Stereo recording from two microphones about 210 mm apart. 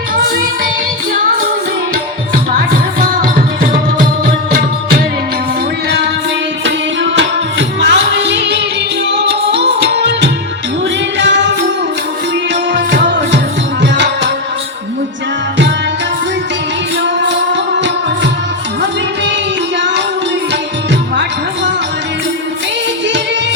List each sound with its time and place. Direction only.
3.0 s music: 40° right (ahead or behind)
7.8 s music: 55° right (ahead or behind)
13.8 s music: 55° right (ahead or behind)
17.2 s music: 55° right (ahead or behind)